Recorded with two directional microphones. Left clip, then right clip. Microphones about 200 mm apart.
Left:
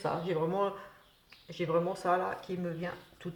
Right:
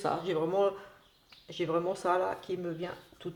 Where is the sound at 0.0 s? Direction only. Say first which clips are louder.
Right 1 dB; 45° right (ahead or behind).